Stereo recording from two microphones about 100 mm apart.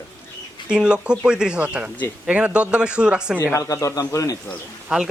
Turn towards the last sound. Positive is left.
turn(degrees=-5)  # may be behind; listen again after turning